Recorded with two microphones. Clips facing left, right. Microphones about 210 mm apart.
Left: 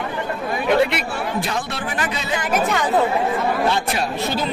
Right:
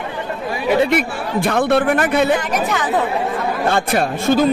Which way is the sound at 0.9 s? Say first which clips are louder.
Right 5 dB; 55° right (ahead or behind).